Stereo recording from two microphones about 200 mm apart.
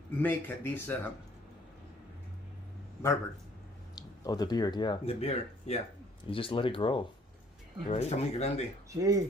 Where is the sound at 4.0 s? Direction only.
20° left (ahead or behind).